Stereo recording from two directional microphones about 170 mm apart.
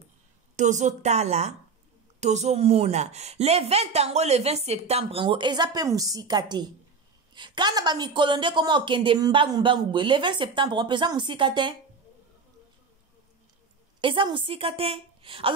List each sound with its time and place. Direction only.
0.6 s a woman's voice: 45° right (ahead or behind); by 11.7 s 25° right (ahead or behind)
14.0 s a woman's voice: 30° right (ahead or behind)